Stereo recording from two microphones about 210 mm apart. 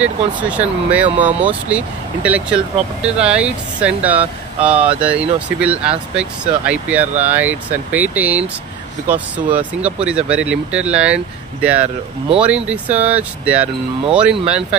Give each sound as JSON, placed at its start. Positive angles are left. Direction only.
{"t": 0.0, "sound": "speech", "side_deg": -5}